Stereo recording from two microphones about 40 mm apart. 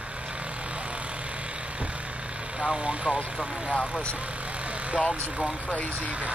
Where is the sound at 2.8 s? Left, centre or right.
Centre.